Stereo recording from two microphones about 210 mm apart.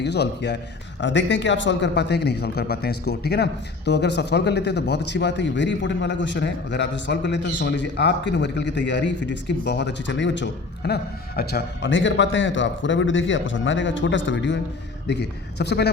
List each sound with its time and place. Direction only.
0.0 s a man's voice: 55° left (ahead or behind)